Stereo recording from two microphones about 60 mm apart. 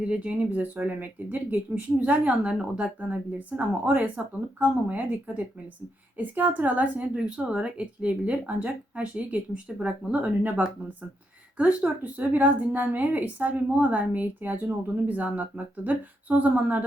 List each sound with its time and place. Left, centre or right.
0.0 s speech: right
11.5 s speech: centre